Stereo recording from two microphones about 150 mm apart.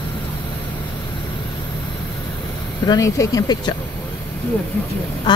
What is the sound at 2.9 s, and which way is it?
Speech, 25° left (ahead or behind).